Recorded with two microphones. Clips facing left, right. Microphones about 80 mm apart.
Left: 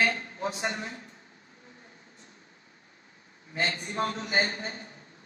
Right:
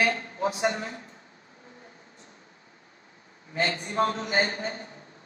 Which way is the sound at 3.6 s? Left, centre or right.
Right.